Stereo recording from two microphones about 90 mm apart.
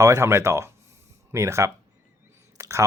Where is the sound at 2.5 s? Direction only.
30° right (ahead or behind).